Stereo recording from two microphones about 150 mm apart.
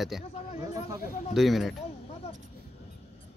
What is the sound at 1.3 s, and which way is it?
Speech, centre (ahead or behind).